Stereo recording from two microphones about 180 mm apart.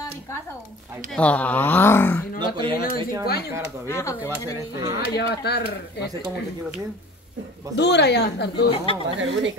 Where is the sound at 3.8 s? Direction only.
15° left (ahead or behind).